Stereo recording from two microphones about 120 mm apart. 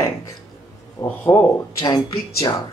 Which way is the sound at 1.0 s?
25° left (ahead or behind).